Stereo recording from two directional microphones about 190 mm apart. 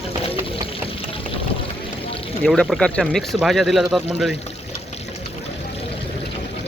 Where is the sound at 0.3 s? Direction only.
30° left (ahead or behind).